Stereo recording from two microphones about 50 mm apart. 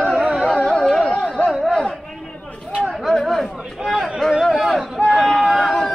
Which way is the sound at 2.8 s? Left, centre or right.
Centre.